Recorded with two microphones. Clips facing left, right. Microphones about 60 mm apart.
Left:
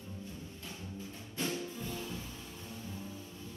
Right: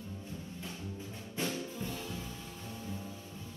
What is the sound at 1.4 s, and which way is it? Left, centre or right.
Music, centre.